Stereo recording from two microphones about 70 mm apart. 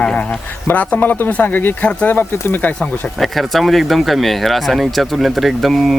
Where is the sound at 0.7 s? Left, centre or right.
Left.